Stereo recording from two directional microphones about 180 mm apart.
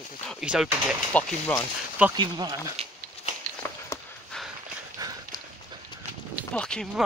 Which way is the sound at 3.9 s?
15° left (ahead or behind).